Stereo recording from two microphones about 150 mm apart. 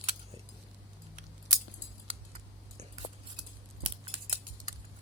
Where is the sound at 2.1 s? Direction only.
40° right (ahead or behind).